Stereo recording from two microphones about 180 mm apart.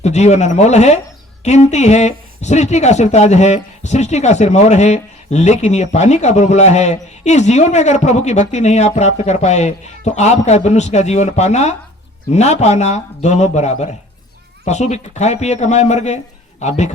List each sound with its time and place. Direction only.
0.0 s speech: 40° left (ahead or behind)